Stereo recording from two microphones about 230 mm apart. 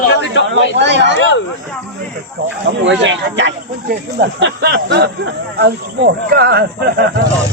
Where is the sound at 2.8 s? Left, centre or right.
Right.